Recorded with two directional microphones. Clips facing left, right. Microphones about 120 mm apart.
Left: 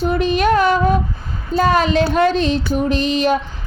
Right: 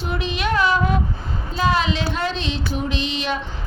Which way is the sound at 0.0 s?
45° left (ahead or behind).